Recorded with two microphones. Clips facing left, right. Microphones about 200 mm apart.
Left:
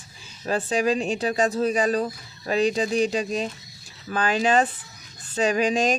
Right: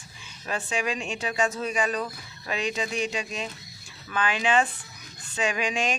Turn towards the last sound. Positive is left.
turn(degrees=40)  # may be behind; listen again after turning